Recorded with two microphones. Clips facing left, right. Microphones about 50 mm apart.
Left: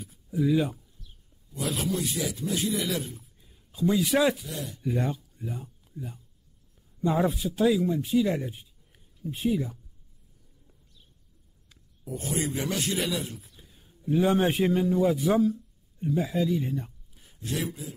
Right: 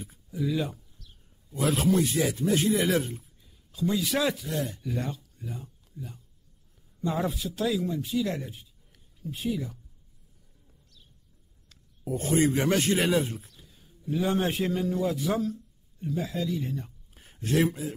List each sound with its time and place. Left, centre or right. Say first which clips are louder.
0.3 s speech: left 5 dB; centre
1.5 s a man's voice: right 5 dB; right
3.3 s a sound: left 3 dB; centre
4.1 s speech: left 4 dB; centre
4.5 s speech: right 5 dB; right
4.8 s a man's voice: left 4 dB; centre
12.0 s speech: right 6 dB; right
13.5 s a sound: even; centre
14.4 s a man's voice: left 4 dB; left
17.1 s a man's voice: right 7 dB; right